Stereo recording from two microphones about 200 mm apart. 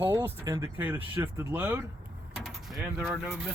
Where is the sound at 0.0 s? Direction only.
15° right (ahead or behind).